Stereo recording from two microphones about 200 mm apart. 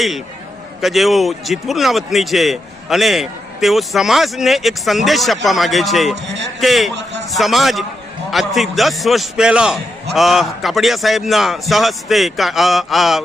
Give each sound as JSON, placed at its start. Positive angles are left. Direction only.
{"t": 0.8, "sound": "a man's voice", "side_deg": 0}
{"t": 6.2, "sound": "a man's voice", "side_deg": -60}
{"t": 6.6, "sound": "a man's voice", "side_deg": 0}